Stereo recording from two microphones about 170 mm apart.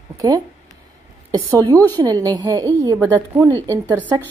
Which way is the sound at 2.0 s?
20° right (ahead or behind).